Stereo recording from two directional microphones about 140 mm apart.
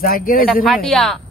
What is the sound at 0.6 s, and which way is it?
Speech, centre (ahead or behind).